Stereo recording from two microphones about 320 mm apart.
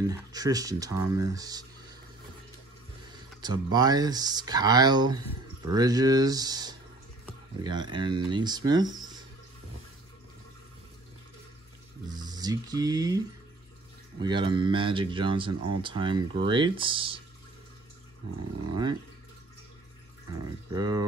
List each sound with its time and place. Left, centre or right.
0.0 s speech: centre
3.3 s speech: centre
12.1 s speech: centre
14.2 s speech: centre
20.7 s speech: centre